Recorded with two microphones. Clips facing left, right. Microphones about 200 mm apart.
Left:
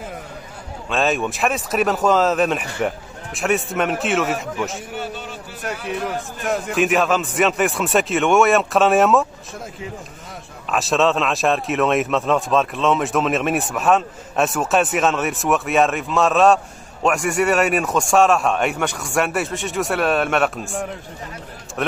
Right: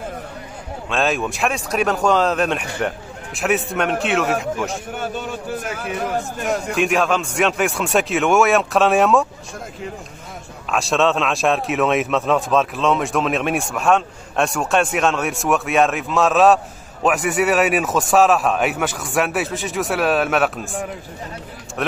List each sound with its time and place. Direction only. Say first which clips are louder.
0.8 s speech: even; centre (ahead or behind)
4.9 s a sound: right 3 dB; 50° right (ahead or behind)
5.6 s speech: even; centre (ahead or behind)
10.7 s speech: even; centre (ahead or behind)